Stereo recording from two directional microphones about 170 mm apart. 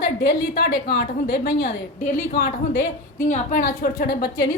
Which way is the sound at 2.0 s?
50° left (ahead or behind).